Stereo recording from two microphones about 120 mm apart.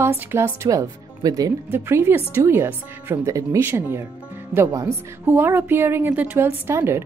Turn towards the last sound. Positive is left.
turn(degrees=-20)  # may be behind; listen again after turning